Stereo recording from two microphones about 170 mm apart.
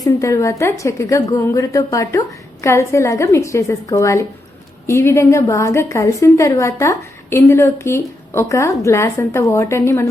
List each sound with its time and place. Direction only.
0.0 s a woman's voice: 15° left (ahead or behind)